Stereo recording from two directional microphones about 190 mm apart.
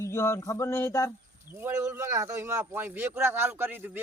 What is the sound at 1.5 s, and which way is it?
Speech, 15° right (ahead or behind).